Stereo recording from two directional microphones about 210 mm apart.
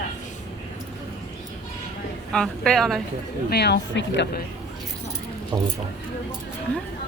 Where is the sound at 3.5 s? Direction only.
50° left (ahead or behind).